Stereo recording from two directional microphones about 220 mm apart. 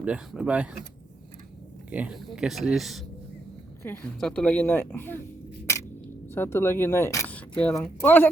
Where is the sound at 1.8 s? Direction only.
5° right (ahead or behind); by 5.2 s 10° left (ahead or behind).